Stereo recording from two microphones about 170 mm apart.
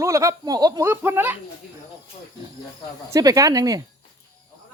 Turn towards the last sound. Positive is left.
turn(degrees=-20)  # may be behind; listen again after turning